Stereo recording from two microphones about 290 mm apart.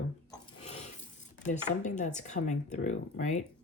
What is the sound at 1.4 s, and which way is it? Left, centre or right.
Speech, left.